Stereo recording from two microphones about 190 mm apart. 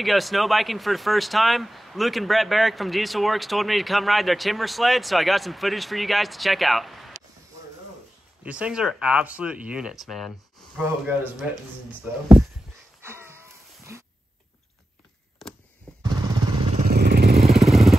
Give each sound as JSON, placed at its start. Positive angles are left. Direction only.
{"t": 0.0, "sound": "speech", "side_deg": 0}
{"t": 8.5, "sound": "speech", "side_deg": -5}
{"t": 13.0, "sound": "a sound", "side_deg": -15}
{"t": 16.0, "sound": "vehicle", "side_deg": -20}
{"t": 16.8, "sound": "vehicle", "side_deg": -55}
{"t": 17.6, "sound": "motorcycle", "side_deg": 0}